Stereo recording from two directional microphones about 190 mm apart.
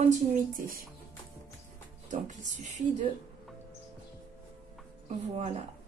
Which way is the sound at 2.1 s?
40° right (ahead or behind).